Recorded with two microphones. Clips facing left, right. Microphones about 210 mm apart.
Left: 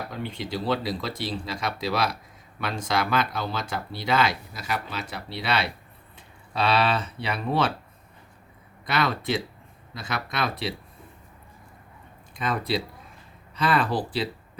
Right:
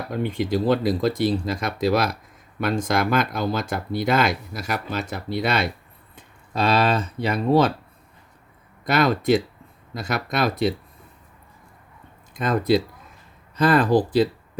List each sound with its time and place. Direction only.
0.1 s speech: 50° right (ahead or behind)
8.8 s speech: 45° right (ahead or behind)
12.3 s speech: 45° right (ahead or behind)